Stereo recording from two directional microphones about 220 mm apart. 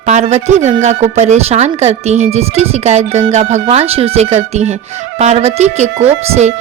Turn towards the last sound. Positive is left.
turn(degrees=-30)  # may be behind; listen again after turning